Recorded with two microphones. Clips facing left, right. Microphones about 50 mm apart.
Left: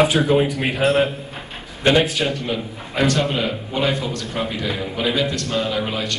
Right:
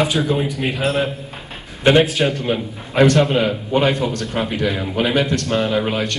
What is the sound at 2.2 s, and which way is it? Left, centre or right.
A man's voice, right.